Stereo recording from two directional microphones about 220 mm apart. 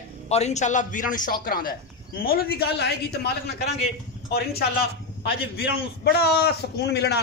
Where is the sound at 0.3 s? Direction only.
30° left (ahead or behind); by 3.5 s 50° left (ahead or behind).